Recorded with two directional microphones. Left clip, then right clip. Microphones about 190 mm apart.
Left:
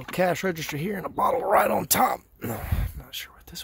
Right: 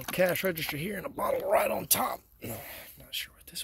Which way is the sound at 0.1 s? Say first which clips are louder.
Left 3 dB; 25° left (ahead or behind).